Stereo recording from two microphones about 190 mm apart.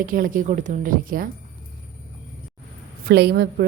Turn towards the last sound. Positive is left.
turn(degrees=-55)  # may be behind; listen again after turning